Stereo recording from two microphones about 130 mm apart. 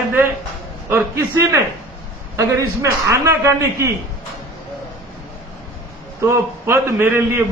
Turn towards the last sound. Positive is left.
turn(degrees=-20)  # may be behind; listen again after turning